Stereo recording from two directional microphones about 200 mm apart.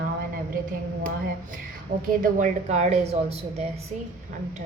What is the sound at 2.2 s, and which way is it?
A woman's voice, 40° right (ahead or behind).